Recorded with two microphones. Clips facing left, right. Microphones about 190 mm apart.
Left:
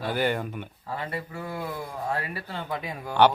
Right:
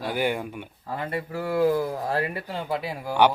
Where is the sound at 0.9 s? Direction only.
45° right (ahead or behind).